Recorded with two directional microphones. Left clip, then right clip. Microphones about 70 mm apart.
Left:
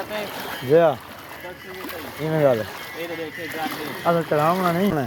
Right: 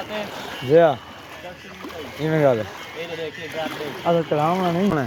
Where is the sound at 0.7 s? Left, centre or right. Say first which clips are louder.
Right 1 dB; right.